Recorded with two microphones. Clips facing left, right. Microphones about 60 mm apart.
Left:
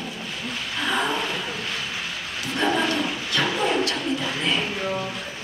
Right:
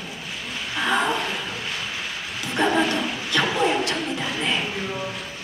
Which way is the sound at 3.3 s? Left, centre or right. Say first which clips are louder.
Right 2 dB; right.